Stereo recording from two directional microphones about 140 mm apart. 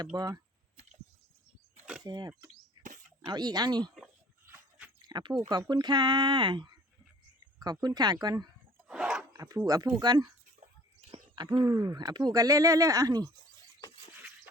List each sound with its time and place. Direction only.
0.0 s speech: 25° right (ahead or behind)
2.0 s speech: 30° right (ahead or behind)
4.4 s a sound: 15° right (ahead or behind)
5.0 s speech: 30° right (ahead or behind)
8.9 s a sound: 5° right (ahead or behind)
9.3 s speech: 25° right (ahead or behind)